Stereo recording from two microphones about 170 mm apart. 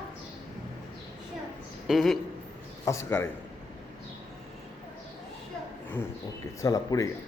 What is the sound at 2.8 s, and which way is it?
Speech, 15° left (ahead or behind).